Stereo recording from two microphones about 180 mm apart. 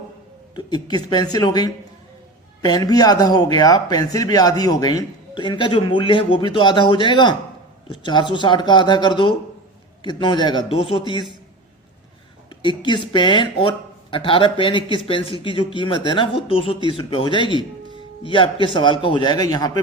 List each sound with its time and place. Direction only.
0.5 s speech: 20° left (ahead or behind)
12.5 s speech: 25° left (ahead or behind)